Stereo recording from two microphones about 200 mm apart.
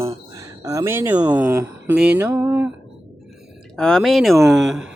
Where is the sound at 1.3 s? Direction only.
10° right (ahead or behind).